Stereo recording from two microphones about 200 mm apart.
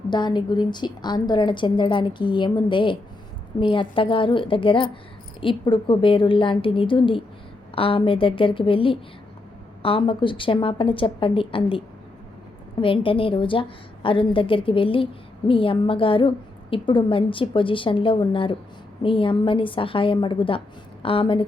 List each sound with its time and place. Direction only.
0.1 s a woman's voice: 20° left (ahead or behind)
12.8 s a woman's voice: 25° left (ahead or behind)